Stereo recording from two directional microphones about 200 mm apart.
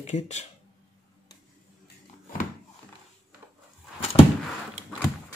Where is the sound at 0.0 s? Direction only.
35° left (ahead or behind).